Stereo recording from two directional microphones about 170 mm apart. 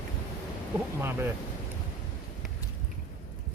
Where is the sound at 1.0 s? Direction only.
15° right (ahead or behind).